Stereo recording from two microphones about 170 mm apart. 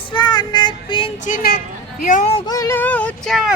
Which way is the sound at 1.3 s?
60° left (ahead or behind).